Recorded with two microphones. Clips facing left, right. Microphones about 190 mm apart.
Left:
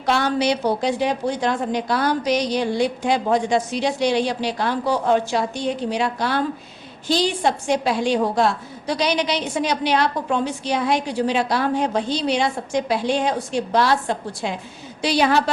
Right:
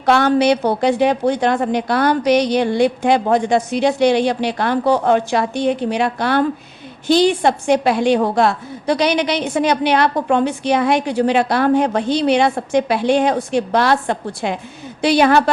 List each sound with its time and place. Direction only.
0.0 s a woman's voice: 55° right (ahead or behind)